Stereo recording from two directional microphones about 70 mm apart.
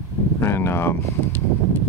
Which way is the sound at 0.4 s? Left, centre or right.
Left.